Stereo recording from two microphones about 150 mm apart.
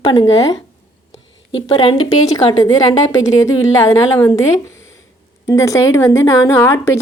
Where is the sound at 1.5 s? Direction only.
35° left (ahead or behind).